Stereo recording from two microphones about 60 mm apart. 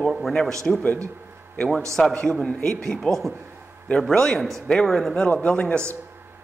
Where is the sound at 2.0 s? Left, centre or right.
Centre.